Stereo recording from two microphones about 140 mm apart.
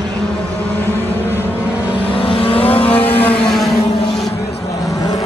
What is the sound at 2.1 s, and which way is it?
Vehicle, 40° left (ahead or behind).